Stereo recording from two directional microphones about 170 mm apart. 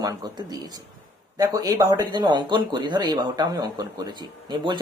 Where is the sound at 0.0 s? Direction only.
25° right (ahead or behind).